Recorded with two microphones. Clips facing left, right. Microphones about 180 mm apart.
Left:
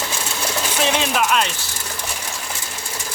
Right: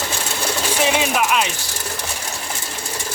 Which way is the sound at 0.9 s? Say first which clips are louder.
Even; 10° right (ahead or behind).